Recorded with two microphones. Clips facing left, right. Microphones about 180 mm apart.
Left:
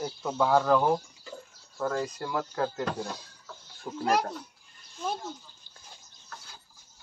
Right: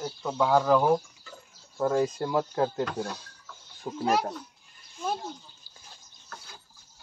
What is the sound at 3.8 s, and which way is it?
Speech, 5° right (ahead or behind).